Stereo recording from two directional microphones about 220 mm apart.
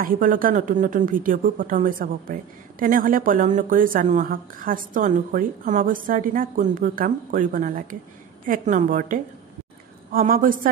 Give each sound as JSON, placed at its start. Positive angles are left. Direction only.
{"t": 0.0, "sound": "a woman's voice", "side_deg": -40}